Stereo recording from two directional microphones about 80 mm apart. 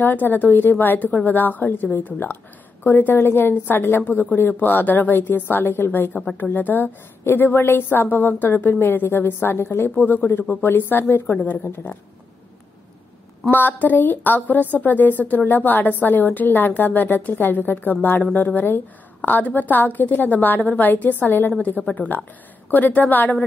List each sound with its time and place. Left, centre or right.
0.0 s a woman's voice: left
13.5 s a woman's voice: left